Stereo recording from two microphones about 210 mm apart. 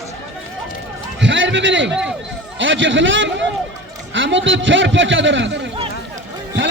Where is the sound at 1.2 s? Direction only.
60° right (ahead or behind).